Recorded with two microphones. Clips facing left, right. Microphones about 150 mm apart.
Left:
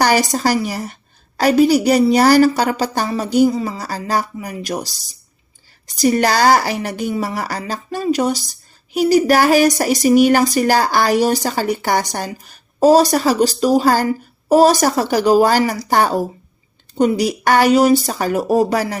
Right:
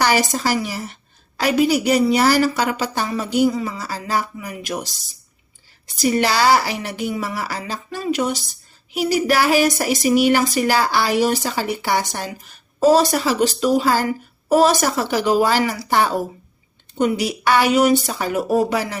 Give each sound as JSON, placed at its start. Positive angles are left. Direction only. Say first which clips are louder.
{"t": 0.0, "sound": "a woman's voice", "louder": "left 3 dB", "side_deg": 40}